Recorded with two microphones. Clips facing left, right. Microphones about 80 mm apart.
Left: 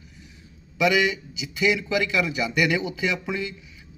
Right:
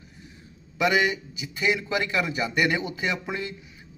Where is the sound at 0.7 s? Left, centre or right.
Right.